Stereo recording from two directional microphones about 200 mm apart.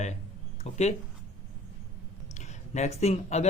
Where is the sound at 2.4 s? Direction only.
35° left (ahead or behind).